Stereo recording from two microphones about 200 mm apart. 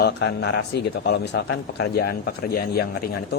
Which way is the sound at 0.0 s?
60° left (ahead or behind).